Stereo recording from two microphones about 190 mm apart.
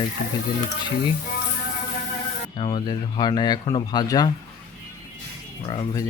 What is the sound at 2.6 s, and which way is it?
Speech, 25° left (ahead or behind).